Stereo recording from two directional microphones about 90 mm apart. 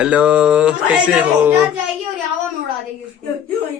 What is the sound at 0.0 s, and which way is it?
Speech, 15° right (ahead or behind).